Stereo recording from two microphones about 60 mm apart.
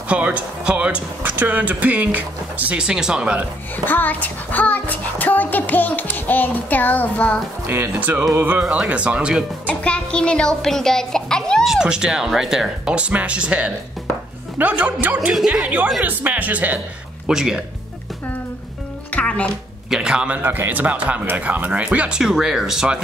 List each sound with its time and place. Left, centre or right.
0.1 s speech: right
1.2 s speech: right
2.8 s speech: centre
3.7 s a child's voice: left
7.6 s speech: right
8.8 s speech: right
9.7 s a child's voice: centre
11.6 s speech: centre; by 16.8 s right
17.3 s speech: centre
19.1 s music: centre
19.9 s speech: centre
20.4 s speech: right
22.2 s speech: centre